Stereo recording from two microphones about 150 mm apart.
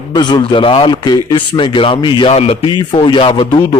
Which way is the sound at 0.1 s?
25° left (ahead or behind).